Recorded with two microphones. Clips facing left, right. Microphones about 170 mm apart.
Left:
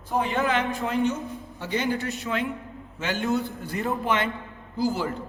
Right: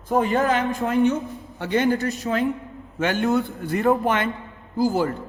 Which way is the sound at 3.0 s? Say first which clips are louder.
Right 5 dB; 55° right (ahead or behind).